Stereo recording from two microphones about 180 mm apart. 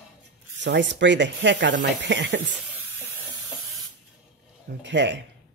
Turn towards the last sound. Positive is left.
turn(degrees=-75)  # may be behind; listen again after turning